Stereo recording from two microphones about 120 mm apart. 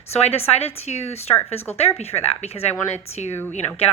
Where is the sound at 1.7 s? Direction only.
5° left (ahead or behind).